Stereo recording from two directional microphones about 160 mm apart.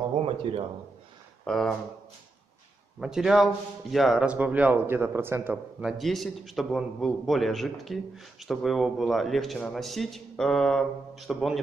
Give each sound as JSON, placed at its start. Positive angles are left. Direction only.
{"t": 0.2, "sound": "speech", "side_deg": -35}
{"t": 1.4, "sound": "speech", "side_deg": 5}
{"t": 3.0, "sound": "a man's voice", "side_deg": -5}